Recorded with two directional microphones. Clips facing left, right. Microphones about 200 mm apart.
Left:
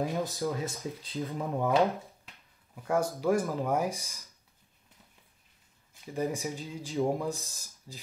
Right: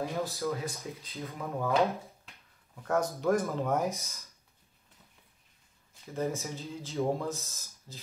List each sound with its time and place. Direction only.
0.1 s speech: 15° left (ahead or behind)
1.0 s speech: 30° left (ahead or behind)
2.7 s speech: 10° left (ahead or behind)
6.1 s speech: 15° left (ahead or behind)